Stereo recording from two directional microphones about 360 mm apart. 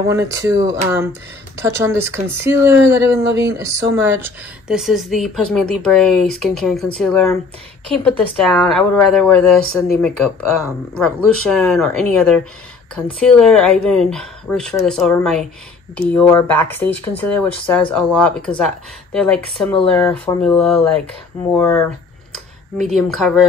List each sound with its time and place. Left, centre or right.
0.1 s speech: centre
3.3 s speech: right
3.5 s speech: centre